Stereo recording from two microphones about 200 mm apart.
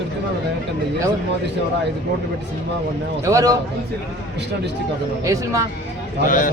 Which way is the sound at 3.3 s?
15° right (ahead or behind).